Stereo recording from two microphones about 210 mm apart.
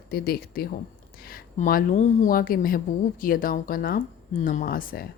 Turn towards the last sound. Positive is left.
turn(degrees=45)  # may be behind; listen again after turning